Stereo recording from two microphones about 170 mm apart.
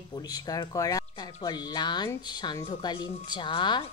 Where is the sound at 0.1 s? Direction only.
25° left (ahead or behind).